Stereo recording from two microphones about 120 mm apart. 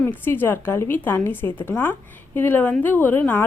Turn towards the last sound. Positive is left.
turn(degrees=15)  # may be behind; listen again after turning